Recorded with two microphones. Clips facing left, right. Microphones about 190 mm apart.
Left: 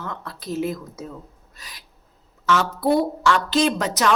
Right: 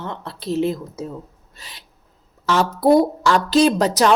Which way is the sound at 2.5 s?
35° right (ahead or behind).